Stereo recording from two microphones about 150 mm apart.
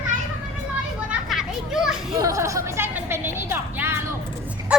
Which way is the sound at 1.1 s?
5° right (ahead or behind).